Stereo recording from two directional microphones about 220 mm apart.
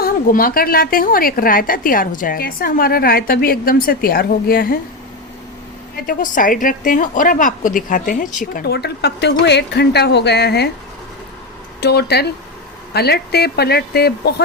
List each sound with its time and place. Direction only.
0.0 s a woman's voice: 40° left (ahead or behind)
6.1 s a woman's voice: 40° left (ahead or behind)
11.8 s speech: 50° left (ahead or behind)